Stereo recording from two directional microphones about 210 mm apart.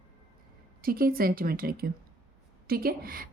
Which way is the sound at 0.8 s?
45° right (ahead or behind).